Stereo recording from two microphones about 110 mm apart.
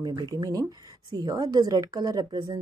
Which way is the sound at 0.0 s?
40° right (ahead or behind).